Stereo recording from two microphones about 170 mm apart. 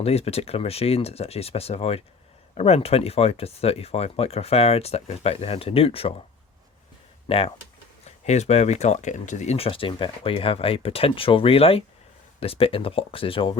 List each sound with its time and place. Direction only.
0.0 s speech: 35° left (ahead or behind)
7.3 s speech: 35° left (ahead or behind)